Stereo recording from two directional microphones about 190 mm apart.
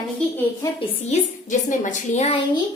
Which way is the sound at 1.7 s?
40° left (ahead or behind).